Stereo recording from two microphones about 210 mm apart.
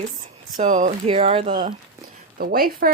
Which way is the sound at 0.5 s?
35° right (ahead or behind).